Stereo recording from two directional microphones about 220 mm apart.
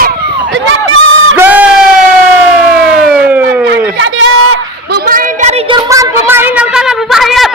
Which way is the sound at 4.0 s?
60° right (ahead or behind).